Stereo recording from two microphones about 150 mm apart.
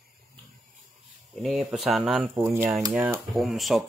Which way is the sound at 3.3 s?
Centre (ahead or behind).